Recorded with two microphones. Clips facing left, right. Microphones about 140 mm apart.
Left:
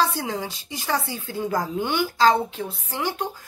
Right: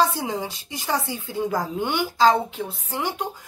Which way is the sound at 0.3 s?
15° right (ahead or behind).